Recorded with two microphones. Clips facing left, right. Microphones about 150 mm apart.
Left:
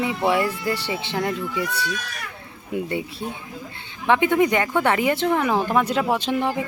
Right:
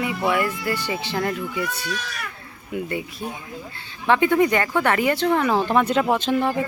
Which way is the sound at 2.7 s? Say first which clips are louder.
Left 1 dB; 25° left (ahead or behind).